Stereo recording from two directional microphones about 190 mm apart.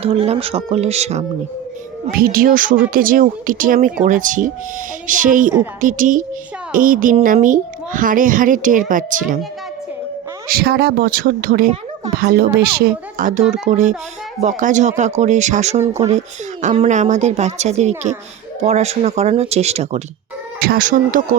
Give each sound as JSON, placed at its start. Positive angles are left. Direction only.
{"t": 0.0, "sound": "speech", "side_deg": -30}
{"t": 2.1, "sound": "a child's voice", "side_deg": -50}
{"t": 10.5, "sound": "a child's voice", "side_deg": -55}
{"t": 20.6, "sound": "a child's voice", "side_deg": -50}